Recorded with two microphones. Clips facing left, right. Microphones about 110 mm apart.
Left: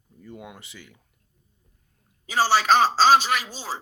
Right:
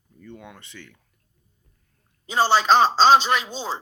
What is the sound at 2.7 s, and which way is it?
Speech, 20° right (ahead or behind).